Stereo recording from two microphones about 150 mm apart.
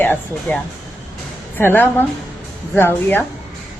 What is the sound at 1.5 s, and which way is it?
Speech, 15° left (ahead or behind).